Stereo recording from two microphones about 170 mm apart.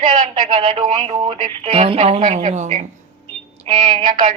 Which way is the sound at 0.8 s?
35° right (ahead or behind).